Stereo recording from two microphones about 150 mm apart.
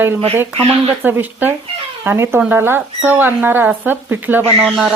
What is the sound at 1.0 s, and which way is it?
Speech, 10° right (ahead or behind).